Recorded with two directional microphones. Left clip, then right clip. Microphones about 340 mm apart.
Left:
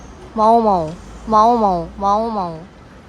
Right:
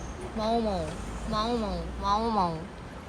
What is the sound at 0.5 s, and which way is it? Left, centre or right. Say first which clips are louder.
Speech: left 14 dB; left.